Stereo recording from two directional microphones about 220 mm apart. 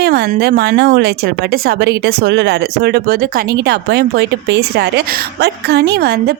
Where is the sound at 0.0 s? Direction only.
45° right (ahead or behind).